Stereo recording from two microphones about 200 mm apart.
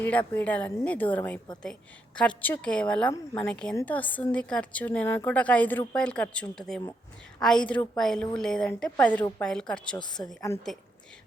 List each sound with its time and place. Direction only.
0.0 s a woman's voice: 10° left (ahead or behind)